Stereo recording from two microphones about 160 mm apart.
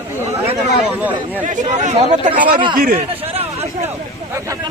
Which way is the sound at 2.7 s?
60° right (ahead or behind).